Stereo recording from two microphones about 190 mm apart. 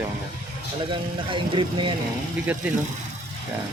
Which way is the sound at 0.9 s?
25° right (ahead or behind).